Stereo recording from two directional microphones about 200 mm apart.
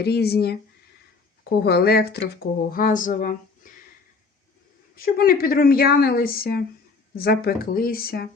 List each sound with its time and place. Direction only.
0.0 s speech: 55° left (ahead or behind)
4.9 s speech: 45° left (ahead or behind)